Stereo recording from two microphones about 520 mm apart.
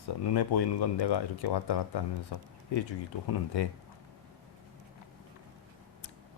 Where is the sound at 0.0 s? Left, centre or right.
Left.